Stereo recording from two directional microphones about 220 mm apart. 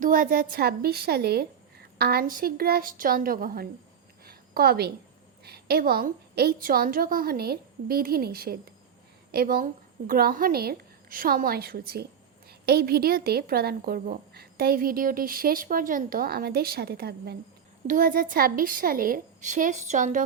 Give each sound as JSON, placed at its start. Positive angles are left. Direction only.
{"t": 0.0, "sound": "speech", "side_deg": -40}
{"t": 4.3, "sound": "a sound", "side_deg": -45}
{"t": 5.5, "sound": "a woman's voice", "side_deg": -45}